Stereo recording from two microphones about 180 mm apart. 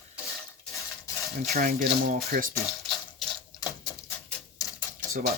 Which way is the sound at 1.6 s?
50° right (ahead or behind).